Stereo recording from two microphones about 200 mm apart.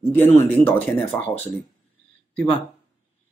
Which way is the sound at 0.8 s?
10° left (ahead or behind).